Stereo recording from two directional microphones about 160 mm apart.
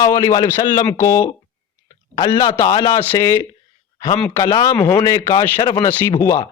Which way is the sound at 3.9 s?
25° left (ahead or behind).